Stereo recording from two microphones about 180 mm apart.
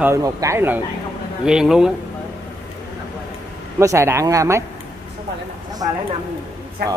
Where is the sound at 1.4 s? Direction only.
5° right (ahead or behind).